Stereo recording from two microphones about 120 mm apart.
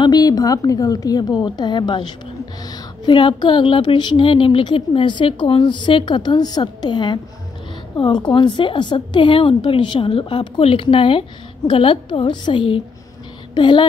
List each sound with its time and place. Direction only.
0.0 s speech: 35° left (ahead or behind)
8.3 s a woman's voice: 40° left (ahead or behind)